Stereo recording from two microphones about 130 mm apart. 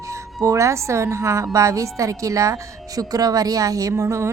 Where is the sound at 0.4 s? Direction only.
25° right (ahead or behind).